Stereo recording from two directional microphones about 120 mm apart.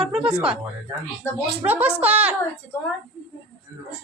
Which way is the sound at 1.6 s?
15° right (ahead or behind).